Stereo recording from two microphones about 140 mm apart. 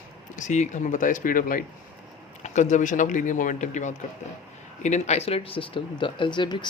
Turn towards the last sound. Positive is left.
turn(degrees=35)  # may be behind; listen again after turning